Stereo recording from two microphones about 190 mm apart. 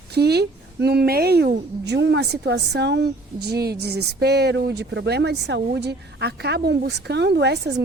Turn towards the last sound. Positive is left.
turn(degrees=-65)  # may be behind; listen again after turning